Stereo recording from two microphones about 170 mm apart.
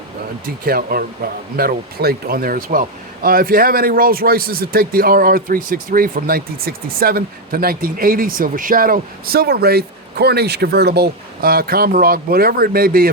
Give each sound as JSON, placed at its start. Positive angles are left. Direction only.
{"t": 0.6, "sound": "speech", "side_deg": -60}